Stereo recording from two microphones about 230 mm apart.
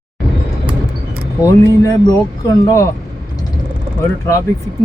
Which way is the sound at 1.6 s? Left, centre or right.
Centre.